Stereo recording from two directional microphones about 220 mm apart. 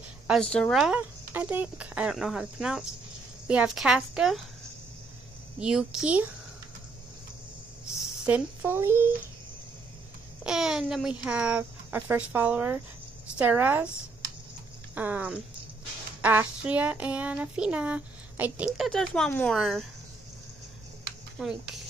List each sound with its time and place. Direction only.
0.3 s speech: 5° left (ahead or behind)
5.6 s speech: 5° right (ahead or behind)
7.9 s a child's voice: 5° right (ahead or behind)
10.4 s speech: centre (ahead or behind)
13.4 s child singing: 10° right (ahead or behind)
15.0 s child singing: 5° right (ahead or behind)
18.8 s speech: centre (ahead or behind)
21.4 s speech: centre (ahead or behind)